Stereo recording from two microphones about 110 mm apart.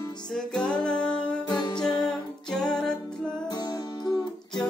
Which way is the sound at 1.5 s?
40° left (ahead or behind).